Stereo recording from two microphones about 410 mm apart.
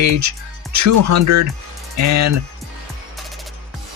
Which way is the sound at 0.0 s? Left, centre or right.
Right.